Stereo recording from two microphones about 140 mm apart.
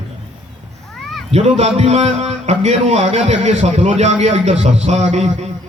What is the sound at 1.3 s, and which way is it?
A man's voice, 45° right (ahead or behind).